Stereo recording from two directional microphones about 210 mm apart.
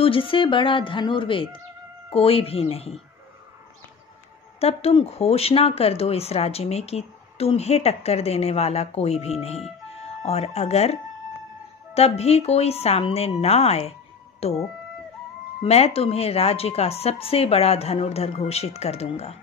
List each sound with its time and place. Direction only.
0.0 s speech: 25° left (ahead or behind)
4.6 s speech: 30° left (ahead or behind)
15.6 s speech: 30° left (ahead or behind)